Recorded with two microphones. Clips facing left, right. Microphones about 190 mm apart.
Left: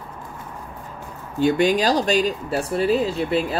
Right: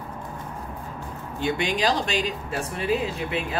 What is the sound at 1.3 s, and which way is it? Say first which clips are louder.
Speech: left 8 dB; 40° left (ahead or behind).